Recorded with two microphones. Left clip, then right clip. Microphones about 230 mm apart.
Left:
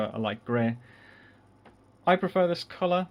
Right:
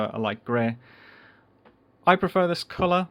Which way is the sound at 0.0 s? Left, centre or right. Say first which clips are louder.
Right 3 dB; right.